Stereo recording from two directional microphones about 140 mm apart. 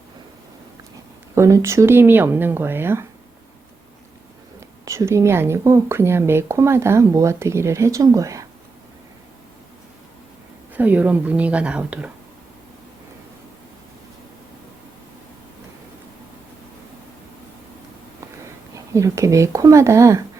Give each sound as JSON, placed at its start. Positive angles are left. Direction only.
{"t": 1.4, "sound": "speech", "side_deg": -20}
{"t": 4.9, "sound": "speech", "side_deg": -20}
{"t": 10.8, "sound": "speech", "side_deg": -10}
{"t": 18.9, "sound": "speech", "side_deg": -20}